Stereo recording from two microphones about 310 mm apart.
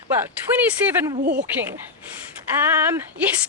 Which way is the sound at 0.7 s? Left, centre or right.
Centre.